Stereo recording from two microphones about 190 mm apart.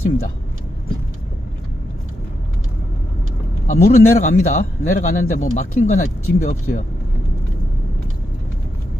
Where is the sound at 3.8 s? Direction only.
50° left (ahead or behind).